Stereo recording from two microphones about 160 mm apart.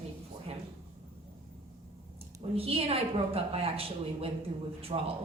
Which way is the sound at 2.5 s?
35° right (ahead or behind).